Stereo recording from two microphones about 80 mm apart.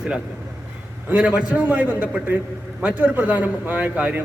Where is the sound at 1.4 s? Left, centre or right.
Centre.